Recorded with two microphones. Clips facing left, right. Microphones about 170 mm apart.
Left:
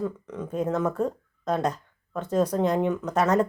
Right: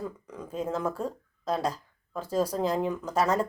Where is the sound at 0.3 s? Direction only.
5° right (ahead or behind).